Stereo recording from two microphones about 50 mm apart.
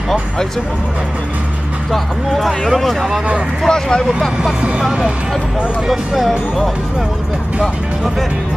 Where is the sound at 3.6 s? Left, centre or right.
Centre.